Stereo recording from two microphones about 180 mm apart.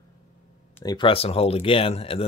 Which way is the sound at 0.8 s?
25° left (ahead or behind).